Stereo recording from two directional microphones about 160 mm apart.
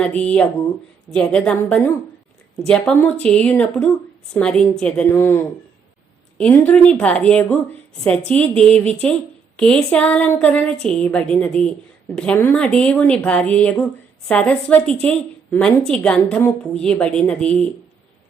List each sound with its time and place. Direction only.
0.0 s a woman's voice: 5° left (ahead or behind)
5.1 s a woman's voice: 15° left (ahead or behind)
6.3 s a woman's voice: 5° left (ahead or behind)